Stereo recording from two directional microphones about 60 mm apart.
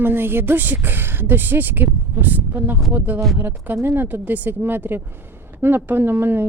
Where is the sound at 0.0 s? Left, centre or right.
Right.